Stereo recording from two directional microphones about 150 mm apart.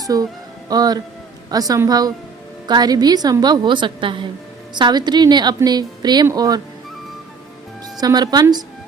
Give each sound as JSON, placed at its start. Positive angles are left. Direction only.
{"t": 0.0, "sound": "a woman's voice", "side_deg": -25}
{"t": 8.0, "sound": "a woman's voice", "side_deg": -25}